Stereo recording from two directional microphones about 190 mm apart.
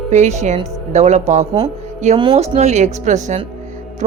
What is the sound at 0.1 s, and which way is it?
A woman's voice, 35° right (ahead or behind).